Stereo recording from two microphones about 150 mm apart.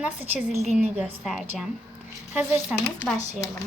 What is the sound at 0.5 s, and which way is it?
Speech, 45° right (ahead or behind).